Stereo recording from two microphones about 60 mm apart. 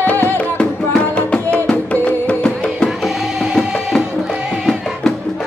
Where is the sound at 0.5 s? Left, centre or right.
Centre.